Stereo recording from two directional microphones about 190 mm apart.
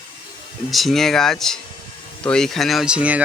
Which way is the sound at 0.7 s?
Centre (ahead or behind).